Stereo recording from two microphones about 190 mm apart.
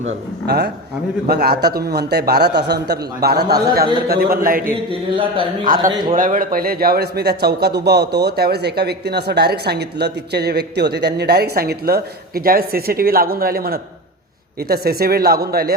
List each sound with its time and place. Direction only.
0.0 s speech: 60° right (ahead or behind)
4.9 s speech: 25° right (ahead or behind)
5.6 s speech: 45° right (ahead or behind)